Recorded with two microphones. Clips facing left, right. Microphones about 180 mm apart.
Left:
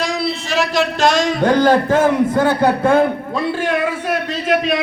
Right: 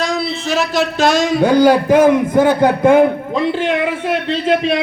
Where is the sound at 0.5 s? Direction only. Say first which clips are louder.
Right 1 dB; 5° right (ahead or behind).